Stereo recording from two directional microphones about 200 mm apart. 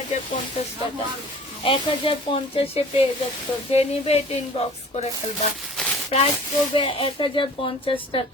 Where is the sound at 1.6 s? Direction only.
25° left (ahead or behind).